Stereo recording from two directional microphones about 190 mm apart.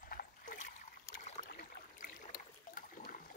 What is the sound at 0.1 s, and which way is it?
Trickle, 50° left (ahead or behind).